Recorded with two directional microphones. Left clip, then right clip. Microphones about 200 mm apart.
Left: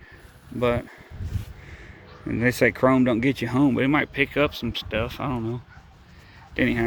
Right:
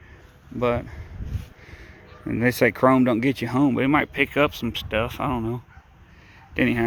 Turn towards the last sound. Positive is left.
turn(degrees=-30)  # may be behind; listen again after turning